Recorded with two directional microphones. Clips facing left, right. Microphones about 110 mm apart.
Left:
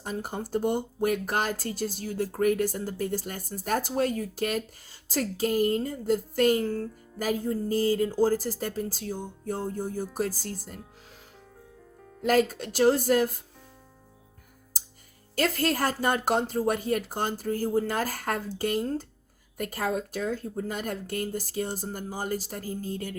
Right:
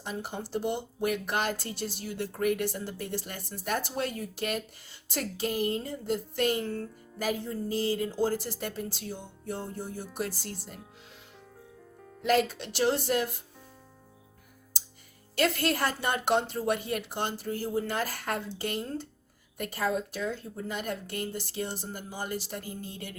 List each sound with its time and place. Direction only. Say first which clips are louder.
0.0 s speech: left 3 dB; 45° left (ahead or behind)
12.2 s speech: left 2 dB; 40° left (ahead or behind)
15.4 s speech: left 1 dB; 40° left (ahead or behind)